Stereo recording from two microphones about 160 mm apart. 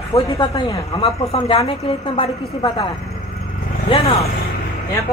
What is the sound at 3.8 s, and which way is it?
Speech, 40° left (ahead or behind).